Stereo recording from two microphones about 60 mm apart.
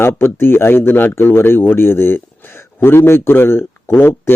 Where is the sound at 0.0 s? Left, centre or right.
Left.